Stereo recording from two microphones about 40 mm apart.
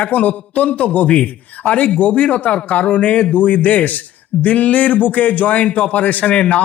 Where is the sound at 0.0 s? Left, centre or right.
Left.